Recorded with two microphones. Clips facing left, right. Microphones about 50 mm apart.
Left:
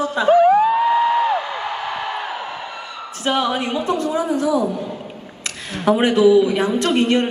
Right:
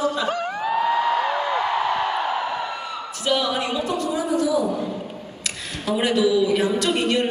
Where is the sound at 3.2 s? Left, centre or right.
Left.